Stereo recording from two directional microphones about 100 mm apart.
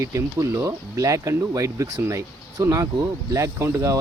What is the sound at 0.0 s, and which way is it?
Speech, 30° right (ahead or behind).